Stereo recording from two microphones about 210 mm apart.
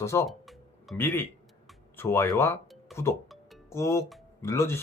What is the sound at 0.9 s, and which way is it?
Speech, 10° left (ahead or behind).